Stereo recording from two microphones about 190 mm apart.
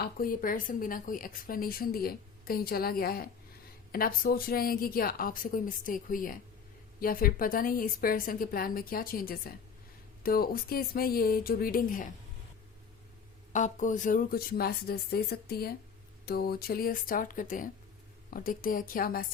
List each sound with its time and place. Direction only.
0.0 s a woman's voice: 50° left (ahead or behind)
13.5 s a woman's voice: 40° left (ahead or behind)